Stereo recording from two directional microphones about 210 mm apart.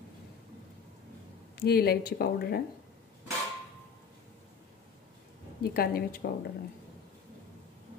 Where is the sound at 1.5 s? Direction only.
50° left (ahead or behind).